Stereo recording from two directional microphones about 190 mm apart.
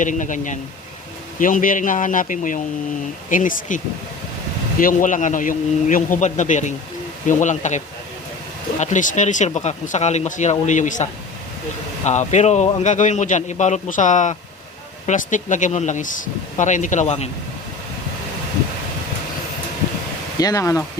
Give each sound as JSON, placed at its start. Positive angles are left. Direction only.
{"t": 0.0, "sound": "speech", "side_deg": 40}
{"t": 4.8, "sound": "speech", "side_deg": 45}
{"t": 8.8, "sound": "speech", "side_deg": 40}
{"t": 20.4, "sound": "speech", "side_deg": 15}